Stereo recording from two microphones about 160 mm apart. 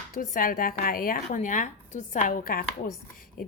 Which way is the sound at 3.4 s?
60° left (ahead or behind).